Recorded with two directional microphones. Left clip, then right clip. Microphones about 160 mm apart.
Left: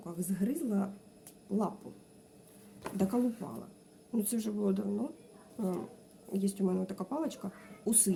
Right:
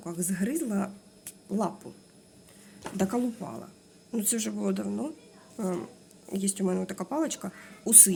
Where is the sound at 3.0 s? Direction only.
15° right (ahead or behind).